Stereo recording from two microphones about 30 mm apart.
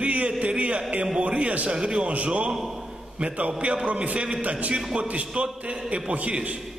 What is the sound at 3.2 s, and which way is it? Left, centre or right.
A man's voice, right.